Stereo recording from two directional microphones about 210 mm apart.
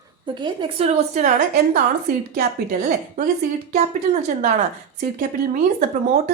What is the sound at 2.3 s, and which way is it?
Speech, 40° right (ahead or behind).